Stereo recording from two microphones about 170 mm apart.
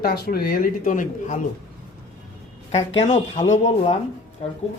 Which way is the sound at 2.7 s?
35° left (ahead or behind).